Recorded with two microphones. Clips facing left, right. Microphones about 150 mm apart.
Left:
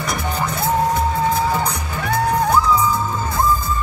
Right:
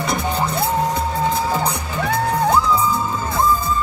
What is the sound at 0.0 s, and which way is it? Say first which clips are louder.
Music: right 2 dB; 30° right (ahead or behind).